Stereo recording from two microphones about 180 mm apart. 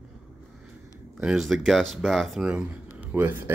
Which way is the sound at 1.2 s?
5° right (ahead or behind).